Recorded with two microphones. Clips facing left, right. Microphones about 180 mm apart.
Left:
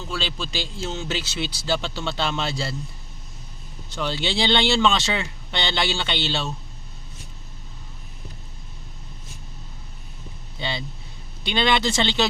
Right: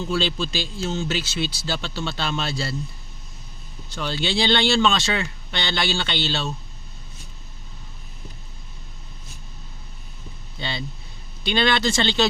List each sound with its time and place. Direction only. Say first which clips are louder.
0.3 s speech: right 3 dB; 15° left (ahead or behind)
3.9 s speech: right 1 dB; 20° left (ahead or behind)
10.6 s speech: left 1 dB; 15° left (ahead or behind)